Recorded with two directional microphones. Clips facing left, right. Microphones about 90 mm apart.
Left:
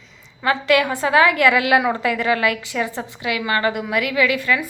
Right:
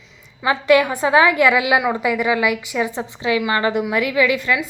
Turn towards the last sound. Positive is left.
turn(degrees=-20)  # may be behind; listen again after turning